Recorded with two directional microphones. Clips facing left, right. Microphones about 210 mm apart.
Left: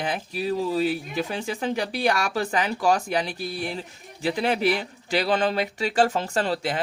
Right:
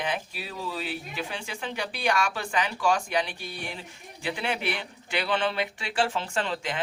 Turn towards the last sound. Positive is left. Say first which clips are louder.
# left 5 dB
turn(degrees=40)  # may be behind; listen again after turning